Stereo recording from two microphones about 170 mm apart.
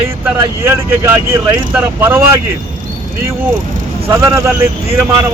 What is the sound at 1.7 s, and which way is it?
Speech, 15° right (ahead or behind).